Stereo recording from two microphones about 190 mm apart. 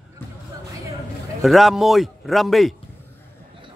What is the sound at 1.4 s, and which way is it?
Speech, centre (ahead or behind).